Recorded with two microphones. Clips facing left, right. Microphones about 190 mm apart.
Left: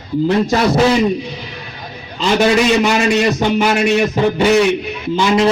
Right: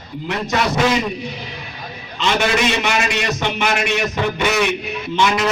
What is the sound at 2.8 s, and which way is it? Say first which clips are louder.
A man's voice: left 7 dB; 35° left (ahead or behind).